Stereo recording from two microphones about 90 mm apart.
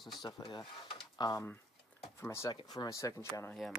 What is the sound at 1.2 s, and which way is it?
Speech, 50° left (ahead or behind).